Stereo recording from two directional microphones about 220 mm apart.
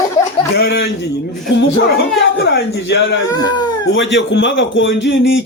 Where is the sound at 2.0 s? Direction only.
50° left (ahead or behind).